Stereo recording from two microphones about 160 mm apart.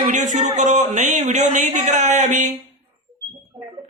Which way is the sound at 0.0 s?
50° right (ahead or behind).